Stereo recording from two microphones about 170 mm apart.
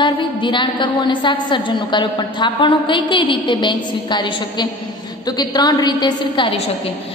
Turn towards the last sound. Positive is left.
turn(degrees=25)  # may be behind; listen again after turning